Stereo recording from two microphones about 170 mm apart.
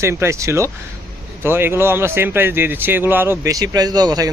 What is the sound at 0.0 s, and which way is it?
Speech, 15° right (ahead or behind).